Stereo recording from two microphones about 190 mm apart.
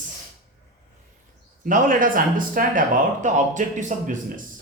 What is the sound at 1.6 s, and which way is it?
Speech, 45° right (ahead or behind).